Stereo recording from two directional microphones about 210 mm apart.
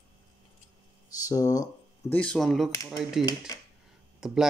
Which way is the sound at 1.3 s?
15° left (ahead or behind).